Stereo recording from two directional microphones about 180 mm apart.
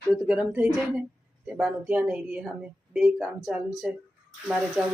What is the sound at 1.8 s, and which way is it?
A woman's voice, 10° right (ahead or behind).